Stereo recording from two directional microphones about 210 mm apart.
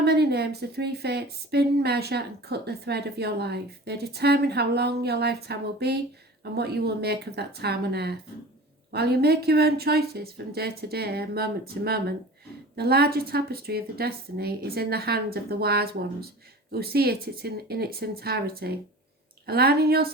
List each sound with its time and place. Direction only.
0.0 s a woman's voice: 50° right (ahead or behind)